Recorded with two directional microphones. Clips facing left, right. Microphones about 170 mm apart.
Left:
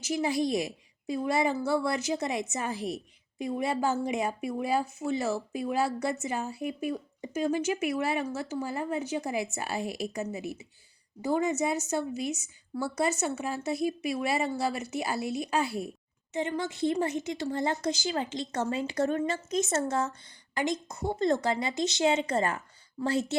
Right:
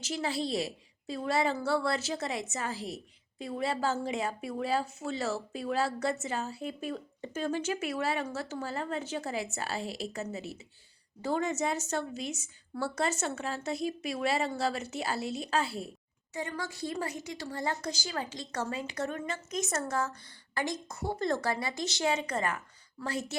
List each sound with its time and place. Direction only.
0.0 s a woman's voice: 15° left (ahead or behind)